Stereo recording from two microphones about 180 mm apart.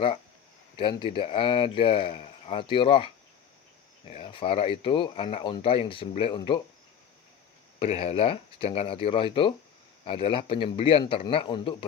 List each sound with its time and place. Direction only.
0.8 s speech: 25° left (ahead or behind)
4.1 s speech: 30° left (ahead or behind)
7.8 s speech: 30° left (ahead or behind)